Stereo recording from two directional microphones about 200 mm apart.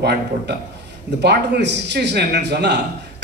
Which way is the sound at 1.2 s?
55° right (ahead or behind).